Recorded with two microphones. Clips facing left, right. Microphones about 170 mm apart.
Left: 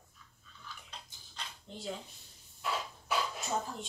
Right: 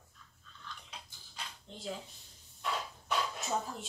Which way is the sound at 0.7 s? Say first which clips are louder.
Right 1 dB; 5° left (ahead or behind).